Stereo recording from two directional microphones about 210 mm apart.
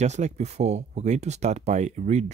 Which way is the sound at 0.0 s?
35° right (ahead or behind).